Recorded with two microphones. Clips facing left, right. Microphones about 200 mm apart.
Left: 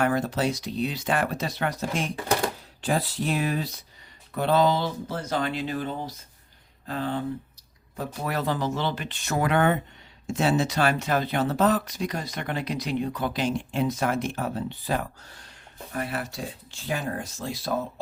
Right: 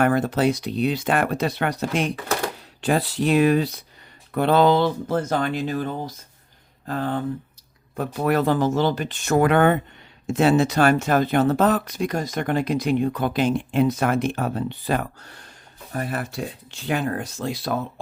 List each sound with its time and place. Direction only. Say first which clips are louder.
0.0 s speech: right 5 dB; 55° right (ahead or behind)
7.9 s speech: right 8 dB; 60° right (ahead or behind)
15.9 s speech: right 3 dB; 45° right (ahead or behind); by 18.0 s 65° right (ahead or behind)